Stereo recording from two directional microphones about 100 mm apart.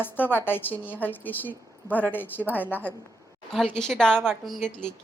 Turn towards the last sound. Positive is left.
turn(degrees=5)  # may be behind; listen again after turning